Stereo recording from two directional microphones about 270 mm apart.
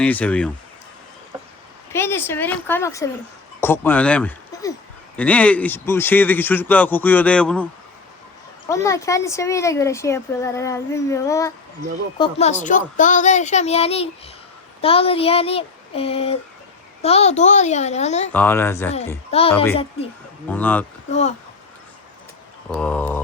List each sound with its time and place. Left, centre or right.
0.0 s speech: centre
1.9 s speech: centre
8.7 s speech: centre
18.3 s speech: centre
19.3 s speech: left
20.5 s speech: centre
21.1 s speech: left
22.7 s speech: centre